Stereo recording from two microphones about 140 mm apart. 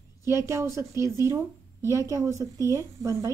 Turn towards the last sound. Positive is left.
turn(degrees=-20)  # may be behind; listen again after turning